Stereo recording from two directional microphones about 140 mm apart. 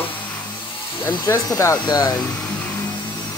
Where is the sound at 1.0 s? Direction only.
20° left (ahead or behind).